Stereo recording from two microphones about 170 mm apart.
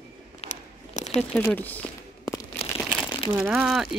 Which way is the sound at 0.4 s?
40° left (ahead or behind).